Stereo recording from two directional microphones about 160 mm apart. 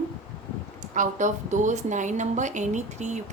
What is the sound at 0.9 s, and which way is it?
A woman's voice, 50° right (ahead or behind).